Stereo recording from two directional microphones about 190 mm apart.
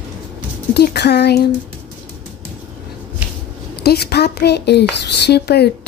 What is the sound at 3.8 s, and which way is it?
Speech, 55° left (ahead or behind).